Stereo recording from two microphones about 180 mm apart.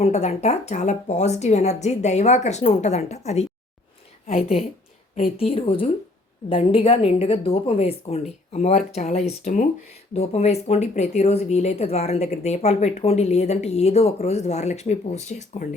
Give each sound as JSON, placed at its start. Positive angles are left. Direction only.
{"t": 0.0, "sound": "speech", "side_deg": 40}
{"t": 5.1, "sound": "speech", "side_deg": 30}